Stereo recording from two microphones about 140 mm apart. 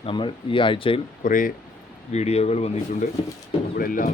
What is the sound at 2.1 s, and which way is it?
Speech, 50° left (ahead or behind).